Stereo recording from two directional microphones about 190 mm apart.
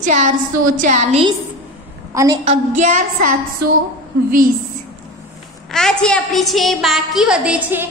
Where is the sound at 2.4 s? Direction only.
40° right (ahead or behind).